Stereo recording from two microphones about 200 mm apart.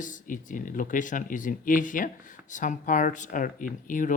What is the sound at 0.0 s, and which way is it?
Speech, 40° left (ahead or behind).